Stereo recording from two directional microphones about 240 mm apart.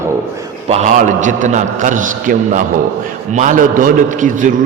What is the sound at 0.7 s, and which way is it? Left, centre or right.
A man's voice, right.